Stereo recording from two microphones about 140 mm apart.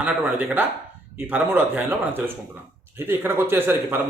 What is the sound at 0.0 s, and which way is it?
A man's voice, 15° right (ahead or behind).